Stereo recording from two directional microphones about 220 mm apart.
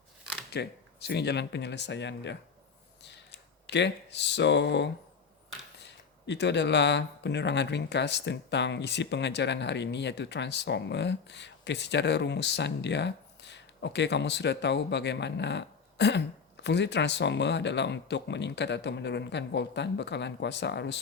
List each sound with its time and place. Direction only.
0.5 s speech: 50° left (ahead or behind)
3.7 s speech: 50° left (ahead or behind)